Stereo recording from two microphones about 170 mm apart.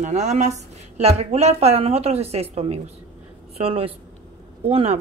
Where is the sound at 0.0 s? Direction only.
40° right (ahead or behind).